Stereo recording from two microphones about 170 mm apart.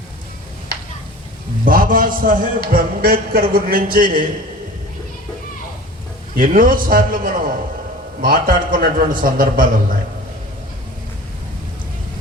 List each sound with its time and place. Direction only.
1.6 s a man's voice: 55° right (ahead or behind)
6.3 s a man's voice: 55° right (ahead or behind)